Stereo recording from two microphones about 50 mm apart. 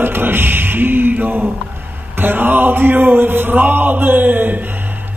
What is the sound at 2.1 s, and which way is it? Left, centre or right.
Speech, right.